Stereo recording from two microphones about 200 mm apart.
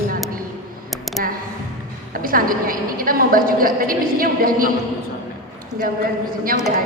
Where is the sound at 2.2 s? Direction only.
45° right (ahead or behind).